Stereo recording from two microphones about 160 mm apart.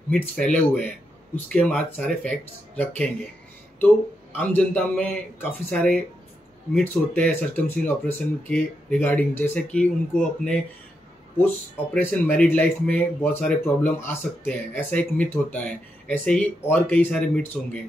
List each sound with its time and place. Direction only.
0.1 s speech: 5° left (ahead or behind)